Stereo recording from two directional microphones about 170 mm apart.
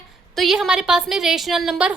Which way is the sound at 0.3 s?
Centre (ahead or behind).